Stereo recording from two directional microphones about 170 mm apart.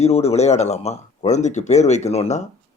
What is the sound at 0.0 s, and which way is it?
A man's voice, 40° left (ahead or behind).